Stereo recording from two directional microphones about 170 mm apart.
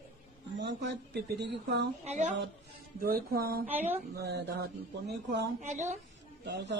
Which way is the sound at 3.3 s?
60° right (ahead or behind).